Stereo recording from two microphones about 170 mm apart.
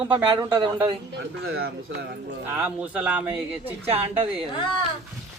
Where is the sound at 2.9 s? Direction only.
10° right (ahead or behind).